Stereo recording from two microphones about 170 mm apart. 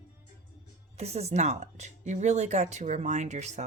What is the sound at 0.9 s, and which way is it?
Speech, 40° right (ahead or behind).